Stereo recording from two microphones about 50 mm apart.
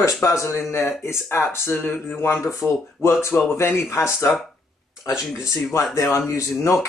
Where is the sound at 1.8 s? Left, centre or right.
Left.